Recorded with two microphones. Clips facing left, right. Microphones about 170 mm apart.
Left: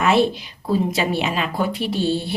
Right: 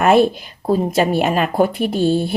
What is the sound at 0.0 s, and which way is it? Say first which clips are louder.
A woman's voice: right 4 dB; 50° right (ahead or behind).